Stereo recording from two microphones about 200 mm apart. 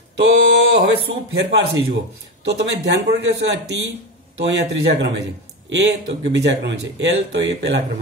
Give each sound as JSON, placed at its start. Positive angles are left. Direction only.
{"t": 0.2, "sound": "speech", "side_deg": -60}